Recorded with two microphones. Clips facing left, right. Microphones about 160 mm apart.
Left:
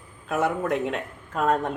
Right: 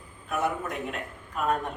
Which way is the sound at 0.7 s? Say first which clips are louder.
Left 8 dB; 90° left.